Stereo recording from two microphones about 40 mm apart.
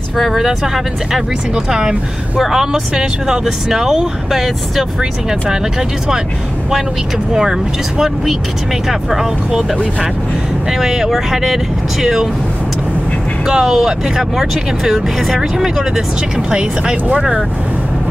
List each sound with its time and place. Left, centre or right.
0.2 s speech: centre
8.8 s speech: centre
10.7 s speech: centre
13.5 s speech: right
13.7 s speech: centre
16.3 s speech: centre